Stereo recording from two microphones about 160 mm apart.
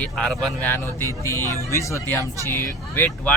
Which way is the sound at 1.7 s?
20° left (ahead or behind).